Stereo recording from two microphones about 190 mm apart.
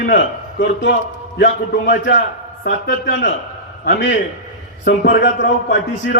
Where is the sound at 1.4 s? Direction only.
60° left (ahead or behind).